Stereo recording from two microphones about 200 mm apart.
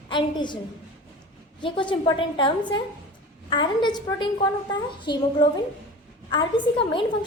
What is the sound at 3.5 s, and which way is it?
A woman's voice, 25° left (ahead or behind).